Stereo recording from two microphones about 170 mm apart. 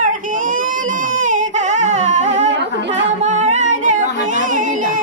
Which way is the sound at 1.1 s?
50° right (ahead or behind).